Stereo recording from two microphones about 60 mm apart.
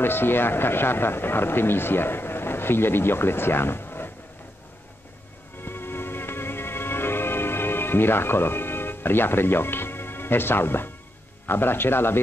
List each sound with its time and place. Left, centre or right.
0.0 s speech: left
5.6 s music: left
11.4 s speech: left